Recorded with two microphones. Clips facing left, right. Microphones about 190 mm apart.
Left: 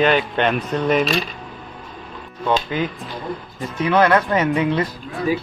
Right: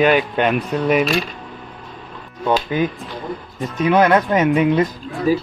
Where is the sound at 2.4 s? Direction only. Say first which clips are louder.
Right 2 dB; 15° right (ahead or behind).